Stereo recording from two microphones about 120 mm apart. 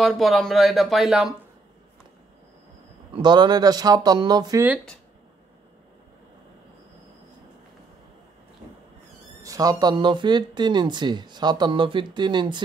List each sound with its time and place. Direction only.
0.0 s speech: centre (ahead or behind)
3.1 s speech: 40° right (ahead or behind)
9.4 s speech: 30° right (ahead or behind)